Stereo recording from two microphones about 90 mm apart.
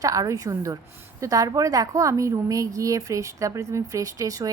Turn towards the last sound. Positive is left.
turn(degrees=-40)  # may be behind; listen again after turning